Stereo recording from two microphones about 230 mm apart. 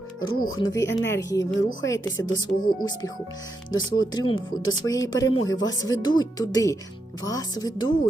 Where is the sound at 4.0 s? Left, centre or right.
Centre.